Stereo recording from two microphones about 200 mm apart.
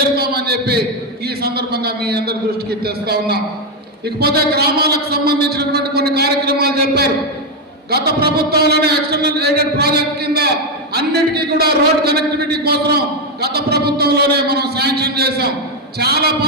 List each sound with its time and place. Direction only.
0.2 s a man's voice: 55° right (ahead or behind)